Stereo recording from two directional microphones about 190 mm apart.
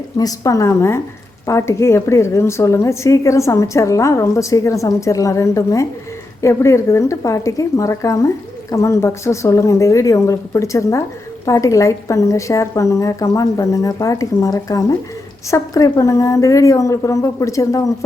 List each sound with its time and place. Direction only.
0.2 s a woman's voice: 20° left (ahead or behind)